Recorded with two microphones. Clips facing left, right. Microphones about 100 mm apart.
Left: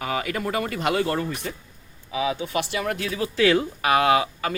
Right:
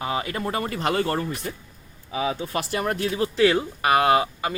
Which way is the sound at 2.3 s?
40° right (ahead or behind).